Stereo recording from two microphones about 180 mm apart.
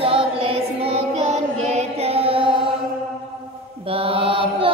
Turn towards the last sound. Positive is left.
turn(degrees=-30)  # may be behind; listen again after turning